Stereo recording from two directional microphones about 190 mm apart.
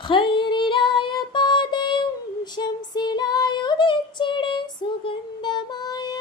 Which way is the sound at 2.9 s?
20° left (ahead or behind).